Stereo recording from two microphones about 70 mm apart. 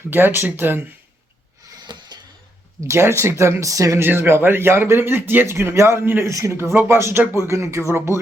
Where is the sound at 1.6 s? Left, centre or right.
Right.